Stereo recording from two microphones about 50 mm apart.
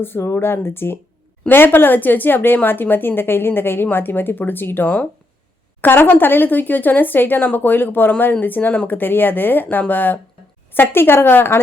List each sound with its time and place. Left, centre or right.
0.0 s a woman's voice: left
10.8 s a woman's voice: left